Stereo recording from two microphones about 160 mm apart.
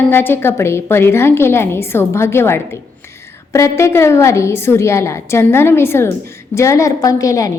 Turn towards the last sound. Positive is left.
turn(degrees=20)  # may be behind; listen again after turning